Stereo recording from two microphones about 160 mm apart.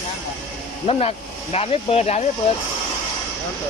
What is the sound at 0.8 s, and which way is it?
Speech, 40° left (ahead or behind).